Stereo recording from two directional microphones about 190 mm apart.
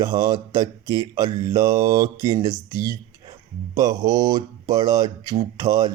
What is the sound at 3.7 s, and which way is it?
Speech, 20° right (ahead or behind).